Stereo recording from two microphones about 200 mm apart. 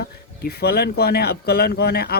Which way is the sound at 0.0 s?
50° left (ahead or behind).